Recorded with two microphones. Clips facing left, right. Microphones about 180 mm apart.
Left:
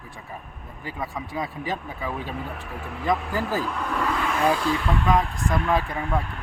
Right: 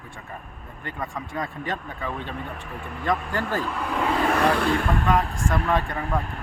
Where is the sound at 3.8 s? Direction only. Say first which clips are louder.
Right 1 dB; 15° right (ahead or behind).